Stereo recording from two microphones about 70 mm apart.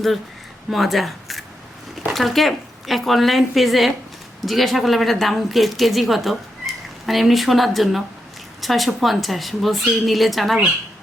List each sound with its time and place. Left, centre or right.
0.7 s a woman's voice: centre